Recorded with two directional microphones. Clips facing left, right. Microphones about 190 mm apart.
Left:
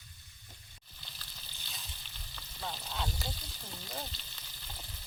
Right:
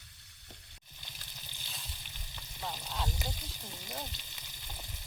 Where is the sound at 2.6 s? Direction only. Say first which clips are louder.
Even; 5° right (ahead or behind).